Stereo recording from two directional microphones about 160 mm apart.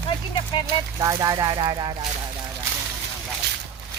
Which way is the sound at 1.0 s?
25° right (ahead or behind).